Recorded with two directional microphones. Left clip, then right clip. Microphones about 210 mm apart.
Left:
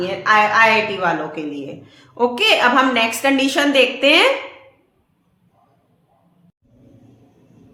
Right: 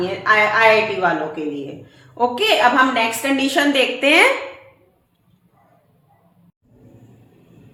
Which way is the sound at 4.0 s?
10° left (ahead or behind).